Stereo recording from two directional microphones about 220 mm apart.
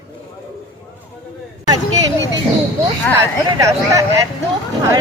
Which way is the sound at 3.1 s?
15° right (ahead or behind).